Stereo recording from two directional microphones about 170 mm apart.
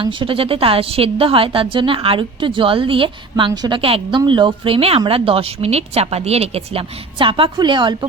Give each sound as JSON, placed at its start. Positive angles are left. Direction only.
{"t": 0.0, "sound": "a woman's voice", "side_deg": -30}